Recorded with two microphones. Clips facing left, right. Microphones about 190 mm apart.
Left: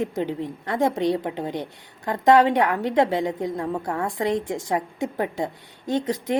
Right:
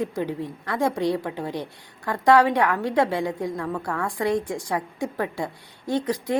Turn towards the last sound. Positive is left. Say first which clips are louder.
# left 1 dB
turn(degrees=20)  # may be behind; listen again after turning